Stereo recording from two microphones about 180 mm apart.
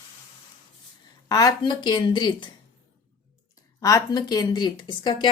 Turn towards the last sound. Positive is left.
turn(degrees=25)  # may be behind; listen again after turning